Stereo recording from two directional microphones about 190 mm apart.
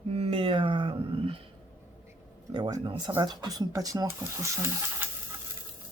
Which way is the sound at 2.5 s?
20° right (ahead or behind).